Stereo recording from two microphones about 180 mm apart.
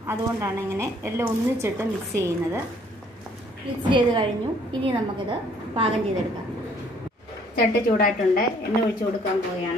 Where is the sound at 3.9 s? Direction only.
25° right (ahead or behind).